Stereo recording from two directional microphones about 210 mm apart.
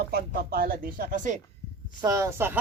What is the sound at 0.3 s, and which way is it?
Speech, 45° right (ahead or behind).